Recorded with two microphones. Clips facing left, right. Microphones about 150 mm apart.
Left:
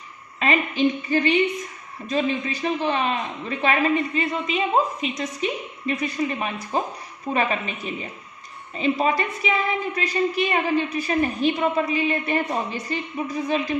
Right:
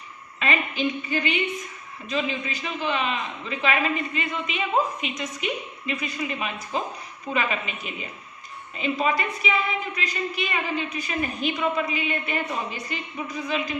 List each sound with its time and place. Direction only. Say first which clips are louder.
0.3 s a woman's voice: left 4 dB; 35° left (ahead or behind)
8.8 s a woman's voice: left 3 dB; 35° left (ahead or behind)